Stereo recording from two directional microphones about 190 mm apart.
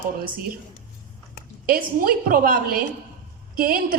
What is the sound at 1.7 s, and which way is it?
A woman's voice, 50° right (ahead or behind).